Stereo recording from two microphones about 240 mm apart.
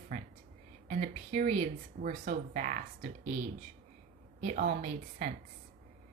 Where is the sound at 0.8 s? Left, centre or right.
Right.